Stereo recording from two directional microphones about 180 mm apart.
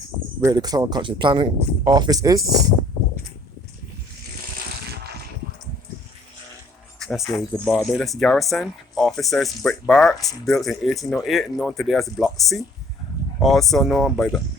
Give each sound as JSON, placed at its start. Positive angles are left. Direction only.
{"t": 0.4, "sound": "speech", "side_deg": -20}
{"t": 7.3, "sound": "speech", "side_deg": 0}